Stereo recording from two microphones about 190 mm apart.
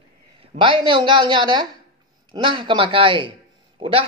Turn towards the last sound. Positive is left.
turn(degrees=-30)  # may be behind; listen again after turning